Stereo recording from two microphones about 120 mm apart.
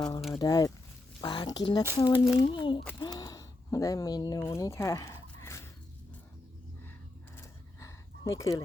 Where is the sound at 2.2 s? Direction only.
Centre (ahead or behind).